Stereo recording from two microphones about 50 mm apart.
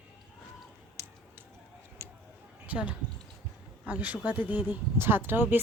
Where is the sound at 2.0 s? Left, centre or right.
Right.